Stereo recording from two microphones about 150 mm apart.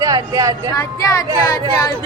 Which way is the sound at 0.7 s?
20° left (ahead or behind).